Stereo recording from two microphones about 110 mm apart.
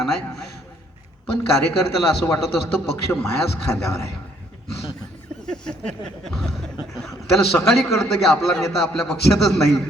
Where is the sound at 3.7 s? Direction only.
30° left (ahead or behind).